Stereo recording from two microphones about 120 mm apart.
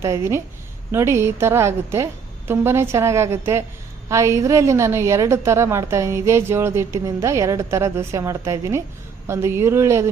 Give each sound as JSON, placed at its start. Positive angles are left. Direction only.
{"t": 0.0, "sound": "a woman's voice", "side_deg": -25}